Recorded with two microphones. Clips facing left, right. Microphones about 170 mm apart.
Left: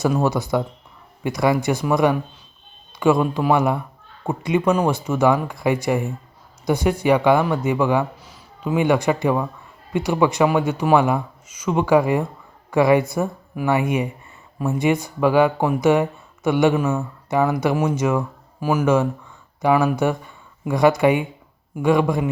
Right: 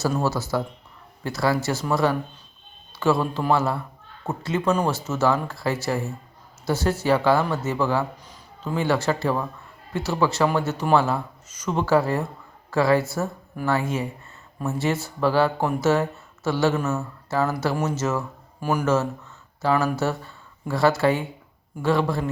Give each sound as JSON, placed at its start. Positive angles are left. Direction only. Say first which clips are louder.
{"t": 0.0, "sound": "speech", "louder": "left 4 dB", "side_deg": 15}